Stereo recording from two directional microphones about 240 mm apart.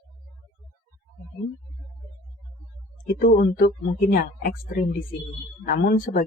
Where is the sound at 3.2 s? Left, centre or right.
Left.